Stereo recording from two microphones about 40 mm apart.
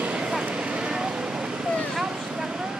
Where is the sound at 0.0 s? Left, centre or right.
Right.